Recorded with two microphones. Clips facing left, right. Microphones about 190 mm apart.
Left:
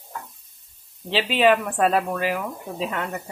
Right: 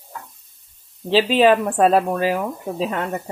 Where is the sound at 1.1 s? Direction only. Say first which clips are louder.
Right 4 dB; 35° right (ahead or behind).